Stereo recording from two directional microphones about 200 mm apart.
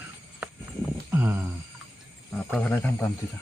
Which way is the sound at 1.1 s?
10° right (ahead or behind).